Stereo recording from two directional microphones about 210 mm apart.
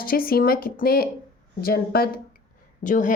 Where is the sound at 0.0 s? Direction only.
45° left (ahead or behind).